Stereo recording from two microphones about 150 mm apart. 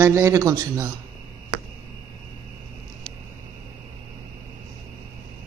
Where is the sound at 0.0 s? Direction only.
20° right (ahead or behind).